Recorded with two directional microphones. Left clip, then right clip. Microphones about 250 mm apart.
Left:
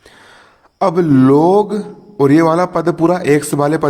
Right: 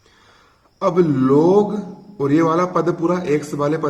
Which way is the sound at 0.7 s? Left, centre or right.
Left.